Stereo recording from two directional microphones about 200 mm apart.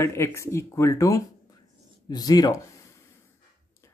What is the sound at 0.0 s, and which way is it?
A man's voice, 15° left (ahead or behind).